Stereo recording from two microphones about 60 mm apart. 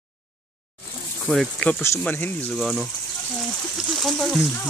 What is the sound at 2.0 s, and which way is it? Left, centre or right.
Speech, left.